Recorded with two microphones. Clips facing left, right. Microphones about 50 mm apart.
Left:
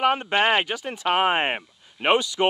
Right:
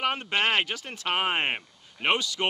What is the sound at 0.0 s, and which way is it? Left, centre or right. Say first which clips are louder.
Speech: left 6 dB; centre.